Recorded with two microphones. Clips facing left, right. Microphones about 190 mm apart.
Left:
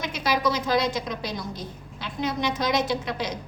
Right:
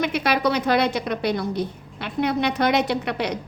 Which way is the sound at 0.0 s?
65° right (ahead or behind).